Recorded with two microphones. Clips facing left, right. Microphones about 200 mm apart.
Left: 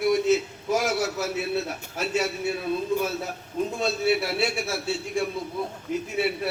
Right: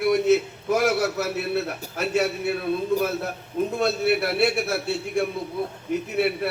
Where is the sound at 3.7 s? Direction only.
60° right (ahead or behind).